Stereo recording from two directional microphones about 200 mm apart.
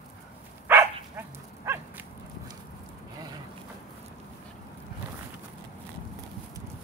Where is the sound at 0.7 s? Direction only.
10° right (ahead or behind).